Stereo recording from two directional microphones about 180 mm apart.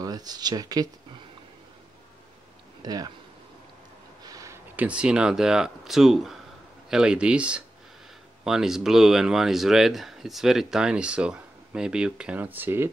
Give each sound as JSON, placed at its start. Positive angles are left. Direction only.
{"t": 0.0, "sound": "speech", "side_deg": -20}
{"t": 2.8, "sound": "speech", "side_deg": -20}
{"t": 4.2, "sound": "speech", "side_deg": -20}